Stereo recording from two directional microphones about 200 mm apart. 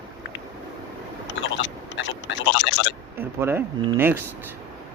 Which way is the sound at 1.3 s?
70° left (ahead or behind).